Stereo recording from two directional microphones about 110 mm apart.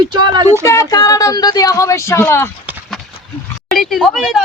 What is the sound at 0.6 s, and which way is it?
Speech, 30° left (ahead or behind).